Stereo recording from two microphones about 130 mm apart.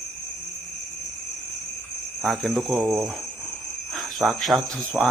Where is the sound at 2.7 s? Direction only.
20° right (ahead or behind).